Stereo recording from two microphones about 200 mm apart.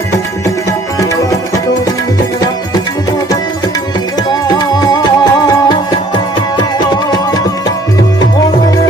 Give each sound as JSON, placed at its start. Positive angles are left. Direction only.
{"t": 0.9, "sound": "tabla", "side_deg": 15}
{"t": 4.3, "sound": "music", "side_deg": 20}